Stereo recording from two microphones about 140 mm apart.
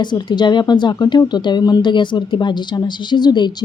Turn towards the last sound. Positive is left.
turn(degrees=30)  # may be behind; listen again after turning